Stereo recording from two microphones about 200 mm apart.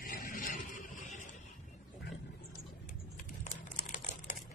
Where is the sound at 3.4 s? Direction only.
40° left (ahead or behind).